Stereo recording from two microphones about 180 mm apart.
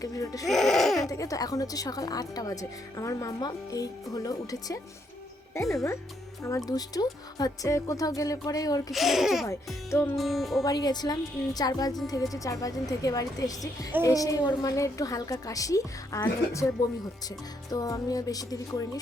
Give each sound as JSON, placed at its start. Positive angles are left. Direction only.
{"t": 0.0, "sound": "speech", "side_deg": 20}
{"t": 0.4, "sound": "music", "side_deg": 0}
{"t": 1.0, "sound": "speech", "side_deg": 20}
{"t": 6.7, "sound": "speech", "side_deg": 20}
{"t": 8.9, "sound": "a child's voice", "side_deg": 0}
{"t": 10.6, "sound": "speech", "side_deg": 20}